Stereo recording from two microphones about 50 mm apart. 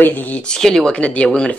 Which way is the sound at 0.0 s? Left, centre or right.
Left.